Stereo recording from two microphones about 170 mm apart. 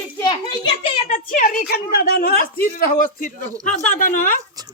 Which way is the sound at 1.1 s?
50° left (ahead or behind).